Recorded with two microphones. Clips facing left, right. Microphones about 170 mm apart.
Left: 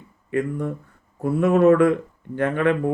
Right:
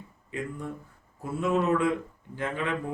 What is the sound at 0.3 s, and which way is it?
Speech, 60° left (ahead or behind).